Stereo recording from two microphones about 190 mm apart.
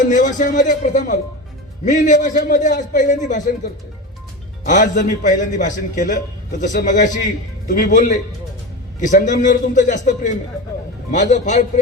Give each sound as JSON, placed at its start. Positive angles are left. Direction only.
{"t": 0.1, "sound": "speech", "side_deg": 40}